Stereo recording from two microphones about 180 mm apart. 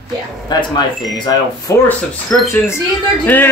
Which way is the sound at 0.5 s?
25° left (ahead or behind).